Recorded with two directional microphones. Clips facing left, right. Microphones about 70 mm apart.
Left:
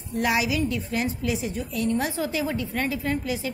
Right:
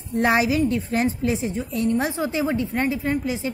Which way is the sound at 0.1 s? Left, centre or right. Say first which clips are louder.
Right 5 dB; right.